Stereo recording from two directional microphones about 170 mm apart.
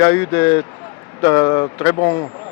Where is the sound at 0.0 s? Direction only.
15° left (ahead or behind).